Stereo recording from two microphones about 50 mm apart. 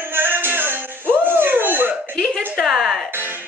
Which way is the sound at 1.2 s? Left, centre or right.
Right.